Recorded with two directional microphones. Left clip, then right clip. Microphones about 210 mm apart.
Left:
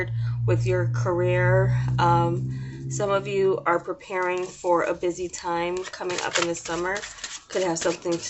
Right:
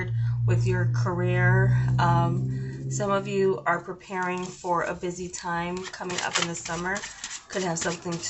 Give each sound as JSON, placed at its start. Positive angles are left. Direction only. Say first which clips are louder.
{"t": 0.0, "sound": "speech", "louder": "left 4 dB", "side_deg": 40}